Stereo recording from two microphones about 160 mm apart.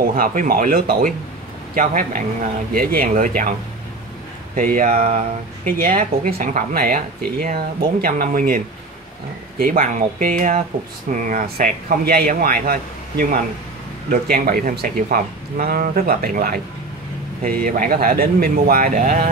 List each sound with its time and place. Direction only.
0.0 s speech: 60° right (ahead or behind)
4.7 s speech: 55° right (ahead or behind)
14.0 s speech: 65° right (ahead or behind)
17.6 s speech: 60° right (ahead or behind)